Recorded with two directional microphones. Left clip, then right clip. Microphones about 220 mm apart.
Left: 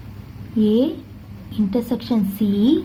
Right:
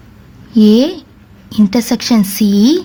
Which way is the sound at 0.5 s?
45° right (ahead or behind).